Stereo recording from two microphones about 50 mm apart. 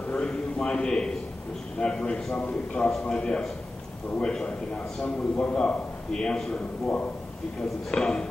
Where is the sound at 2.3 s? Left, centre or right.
Left.